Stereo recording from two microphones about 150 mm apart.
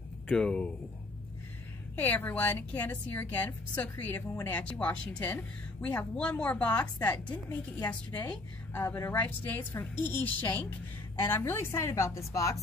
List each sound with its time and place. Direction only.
0.3 s speech: 5° left (ahead or behind)
2.0 s a woman's voice: 10° left (ahead or behind)